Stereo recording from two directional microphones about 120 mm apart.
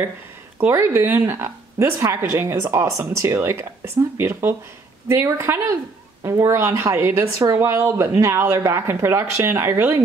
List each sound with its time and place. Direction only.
0.6 s a woman's voice: 20° right (ahead or behind)